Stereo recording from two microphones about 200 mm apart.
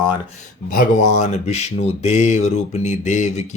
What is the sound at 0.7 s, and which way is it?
Speech, 40° left (ahead or behind).